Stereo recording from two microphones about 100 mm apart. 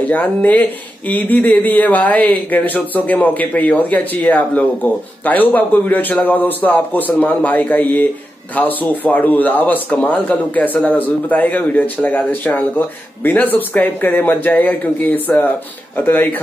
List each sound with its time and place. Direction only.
0.1 s speech: 15° left (ahead or behind)